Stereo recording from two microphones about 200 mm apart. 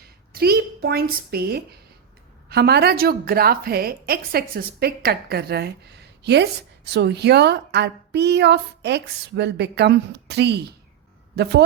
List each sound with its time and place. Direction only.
0.0 s a woman's voice: 50° right (ahead or behind)